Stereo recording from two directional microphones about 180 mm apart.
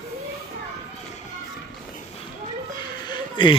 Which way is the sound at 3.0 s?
25° left (ahead or behind).